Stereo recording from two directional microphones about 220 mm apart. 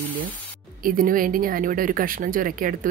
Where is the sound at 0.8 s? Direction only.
40° right (ahead or behind).